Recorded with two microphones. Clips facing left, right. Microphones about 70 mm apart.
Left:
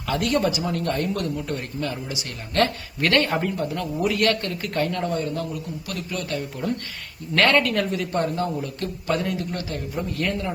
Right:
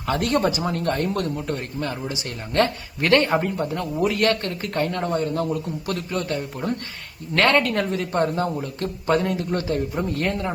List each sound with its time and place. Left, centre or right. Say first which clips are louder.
0.1 s speech: right 1 dB; right